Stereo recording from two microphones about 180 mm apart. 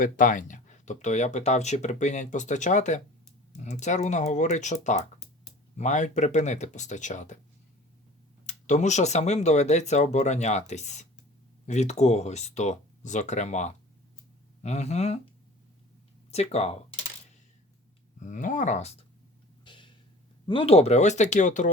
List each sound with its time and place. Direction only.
0.0 s speech: 45° left (ahead or behind)
8.4 s speech: 40° left (ahead or behind)
16.3 s speech: 35° left (ahead or behind)
18.2 s speech: 45° left (ahead or behind)
19.6 s a sound: 25° left (ahead or behind)
20.5 s speech: 30° left (ahead or behind)